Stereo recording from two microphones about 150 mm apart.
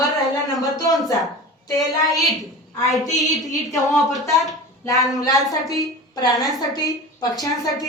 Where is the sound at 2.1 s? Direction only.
Centre (ahead or behind).